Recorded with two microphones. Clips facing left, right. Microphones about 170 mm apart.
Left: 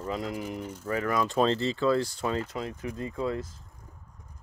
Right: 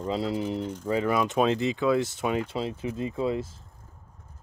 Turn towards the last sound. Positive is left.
turn(degrees=-25)  # may be behind; listen again after turning